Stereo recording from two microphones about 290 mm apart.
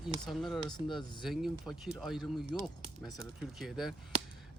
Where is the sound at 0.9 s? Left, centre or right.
Centre.